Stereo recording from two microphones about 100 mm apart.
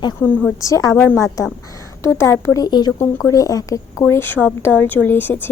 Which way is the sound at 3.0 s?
35° left (ahead or behind).